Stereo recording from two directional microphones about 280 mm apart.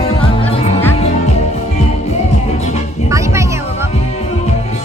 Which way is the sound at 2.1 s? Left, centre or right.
Left.